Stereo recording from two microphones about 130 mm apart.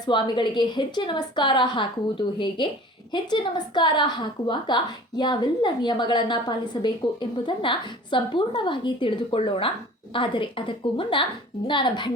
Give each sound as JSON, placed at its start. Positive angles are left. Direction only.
{"t": 0.0, "sound": "a woman's voice", "side_deg": 35}